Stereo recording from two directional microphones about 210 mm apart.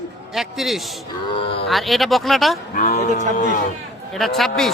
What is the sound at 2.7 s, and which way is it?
Speech, 40° left (ahead or behind).